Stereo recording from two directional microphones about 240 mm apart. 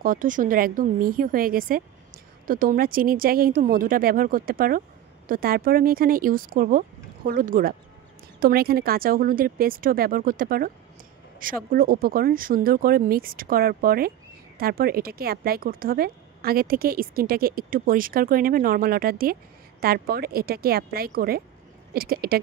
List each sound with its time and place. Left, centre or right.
0.0 s a woman's voice: right